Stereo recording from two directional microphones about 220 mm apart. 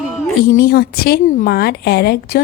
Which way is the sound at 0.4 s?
40° left (ahead or behind).